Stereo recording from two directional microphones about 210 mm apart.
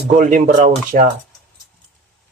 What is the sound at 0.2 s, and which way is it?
Speech, 40° right (ahead or behind).